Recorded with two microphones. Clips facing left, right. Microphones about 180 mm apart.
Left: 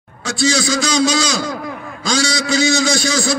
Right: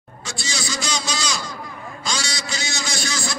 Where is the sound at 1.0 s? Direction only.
90° left.